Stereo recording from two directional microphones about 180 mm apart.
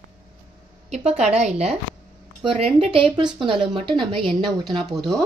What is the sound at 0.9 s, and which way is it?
Speech, 35° right (ahead or behind).